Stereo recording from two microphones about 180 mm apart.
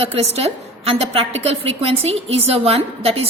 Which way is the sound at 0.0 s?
35° right (ahead or behind).